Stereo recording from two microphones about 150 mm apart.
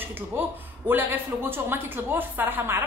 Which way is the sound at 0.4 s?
15° right (ahead or behind).